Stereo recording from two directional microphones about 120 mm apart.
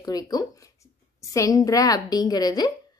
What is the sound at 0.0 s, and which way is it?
A woman's voice, 35° left (ahead or behind).